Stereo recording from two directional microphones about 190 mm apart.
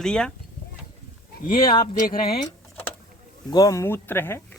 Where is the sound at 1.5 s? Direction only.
50° left (ahead or behind).